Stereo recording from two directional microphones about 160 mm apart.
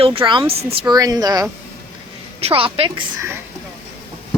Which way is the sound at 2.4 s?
35° right (ahead or behind).